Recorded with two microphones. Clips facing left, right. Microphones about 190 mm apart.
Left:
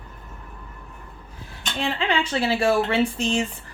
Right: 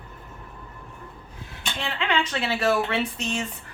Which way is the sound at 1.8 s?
30° left (ahead or behind).